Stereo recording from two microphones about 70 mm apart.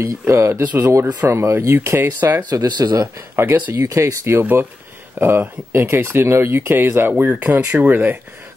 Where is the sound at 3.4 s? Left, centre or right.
Right.